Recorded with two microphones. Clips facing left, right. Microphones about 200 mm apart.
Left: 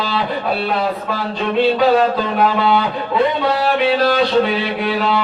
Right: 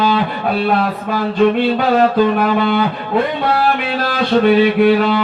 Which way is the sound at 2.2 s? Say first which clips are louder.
Right 4 dB; 50° right (ahead or behind).